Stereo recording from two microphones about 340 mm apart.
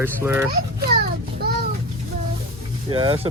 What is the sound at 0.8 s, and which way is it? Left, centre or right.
Child singing, right.